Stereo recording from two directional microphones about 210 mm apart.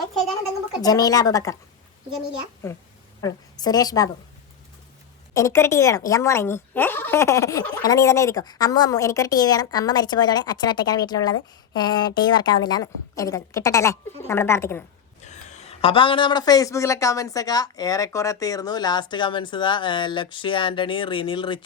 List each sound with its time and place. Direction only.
0.8 s speech: 15° left (ahead or behind)
2.6 s a woman's voice: 15° left (ahead or behind)
5.3 s speech: 15° left (ahead or behind)
15.2 s speech: 35° left (ahead or behind)